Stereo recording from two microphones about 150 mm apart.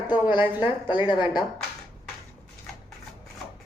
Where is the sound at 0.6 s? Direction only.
30° left (ahead or behind).